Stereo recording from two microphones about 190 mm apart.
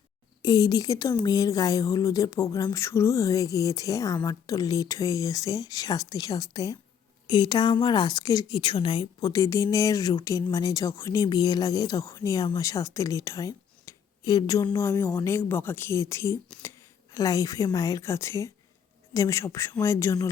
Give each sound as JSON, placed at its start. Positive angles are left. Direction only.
{"t": 0.4, "sound": "a woman's voice", "side_deg": 20}